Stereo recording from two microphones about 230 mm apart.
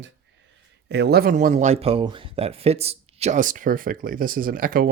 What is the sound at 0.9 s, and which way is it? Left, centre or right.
Speech, right.